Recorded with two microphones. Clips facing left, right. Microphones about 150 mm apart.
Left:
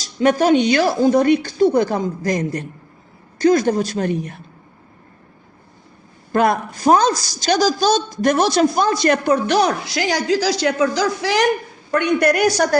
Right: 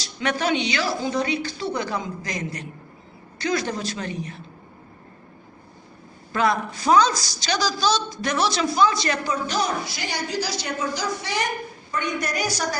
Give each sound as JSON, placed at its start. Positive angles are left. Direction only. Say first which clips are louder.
{"t": 0.0, "sound": "a man's voice", "louder": "left 9 dB", "side_deg": 45}
{"t": 6.3, "sound": "a man's voice", "louder": "left 5 dB", "side_deg": 50}
{"t": 11.9, "sound": "a woman's voice", "louder": "left 12 dB", "side_deg": 65}